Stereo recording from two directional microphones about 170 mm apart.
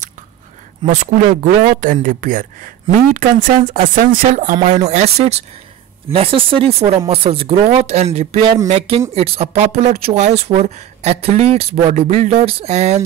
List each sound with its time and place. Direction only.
0.8 s speech: 45° right (ahead or behind)